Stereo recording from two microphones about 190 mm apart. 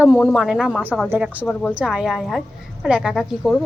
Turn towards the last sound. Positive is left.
turn(degrees=5)  # may be behind; listen again after turning